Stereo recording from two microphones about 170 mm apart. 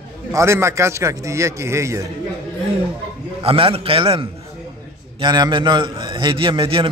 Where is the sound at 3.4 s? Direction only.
35° right (ahead or behind).